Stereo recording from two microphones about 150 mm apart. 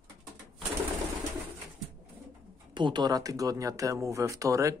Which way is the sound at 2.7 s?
30° right (ahead or behind).